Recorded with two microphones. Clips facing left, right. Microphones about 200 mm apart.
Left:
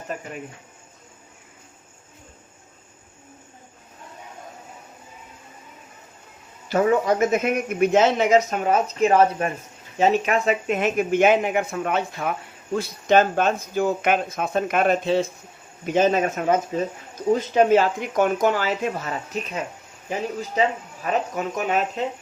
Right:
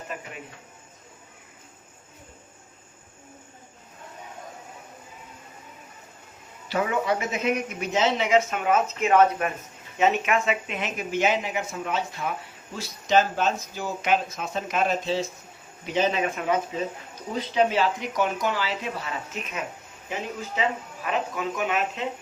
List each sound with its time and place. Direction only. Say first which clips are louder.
6.7 s a man's voice: left 6 dB; 45° left (ahead or behind)